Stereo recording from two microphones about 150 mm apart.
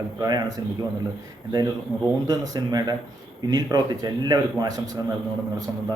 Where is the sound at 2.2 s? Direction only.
25° right (ahead or behind).